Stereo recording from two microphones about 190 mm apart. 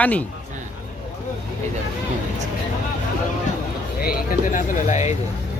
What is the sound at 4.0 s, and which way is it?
Speech, 50° left (ahead or behind).